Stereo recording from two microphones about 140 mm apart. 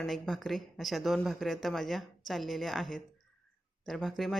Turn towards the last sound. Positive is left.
turn(degrees=0)  # may be behind; listen again after turning